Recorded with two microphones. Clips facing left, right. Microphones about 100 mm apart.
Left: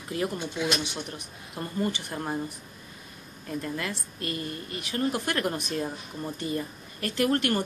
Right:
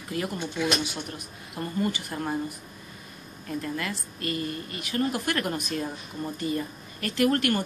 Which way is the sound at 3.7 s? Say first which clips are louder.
Right 1 dB; 25° left (ahead or behind).